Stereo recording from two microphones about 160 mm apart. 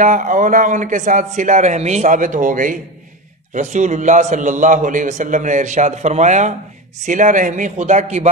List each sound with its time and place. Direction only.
0.0 s a man's voice: 50° right (ahead or behind)